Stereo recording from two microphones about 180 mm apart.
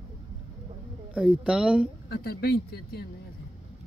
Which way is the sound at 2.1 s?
60° left (ahead or behind).